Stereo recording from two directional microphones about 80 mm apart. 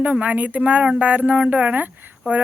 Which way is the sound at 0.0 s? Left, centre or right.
Centre.